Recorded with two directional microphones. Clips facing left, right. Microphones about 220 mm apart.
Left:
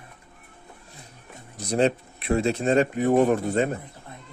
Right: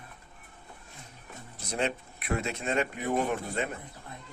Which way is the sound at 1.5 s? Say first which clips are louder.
Left 9 dB; 35° left (ahead or behind).